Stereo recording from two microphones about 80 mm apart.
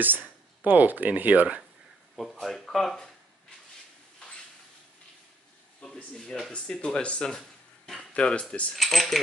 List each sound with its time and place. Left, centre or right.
0.0 s speech: right
2.4 s speech: centre
5.8 s a sound: centre
6.1 s speech: centre
6.5 s speech: centre
8.7 s speech: centre